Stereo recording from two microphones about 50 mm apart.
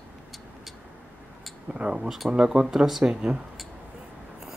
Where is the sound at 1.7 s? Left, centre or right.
Right.